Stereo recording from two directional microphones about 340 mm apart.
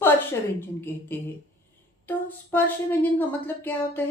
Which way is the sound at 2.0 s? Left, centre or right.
Centre.